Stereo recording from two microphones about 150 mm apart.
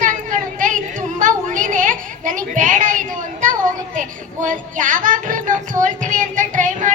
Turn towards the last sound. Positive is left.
turn(degrees=-55)  # may be behind; listen again after turning